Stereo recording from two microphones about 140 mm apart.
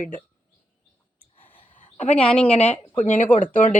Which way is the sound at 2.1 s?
5° left (ahead or behind).